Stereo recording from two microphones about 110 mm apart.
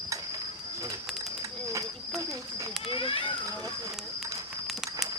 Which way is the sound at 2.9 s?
55° left (ahead or behind).